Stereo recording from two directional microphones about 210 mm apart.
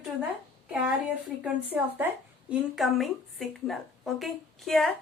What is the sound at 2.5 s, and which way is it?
A woman's voice, centre (ahead or behind).